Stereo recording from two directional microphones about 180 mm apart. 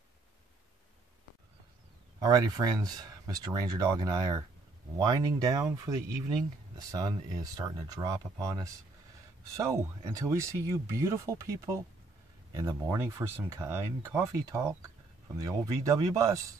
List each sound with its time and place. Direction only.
2.1 s speech: 20° right (ahead or behind)